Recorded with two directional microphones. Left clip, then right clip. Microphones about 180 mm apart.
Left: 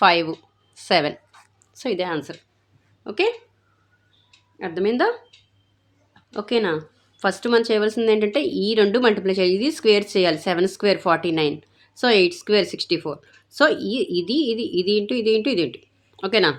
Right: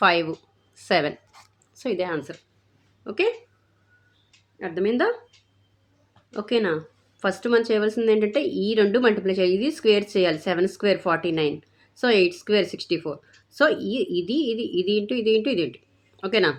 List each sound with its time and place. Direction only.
0.0 s a woman's voice: 15° left (ahead or behind)
4.5 s speech: 30° left (ahead or behind)
6.3 s speech: 20° left (ahead or behind)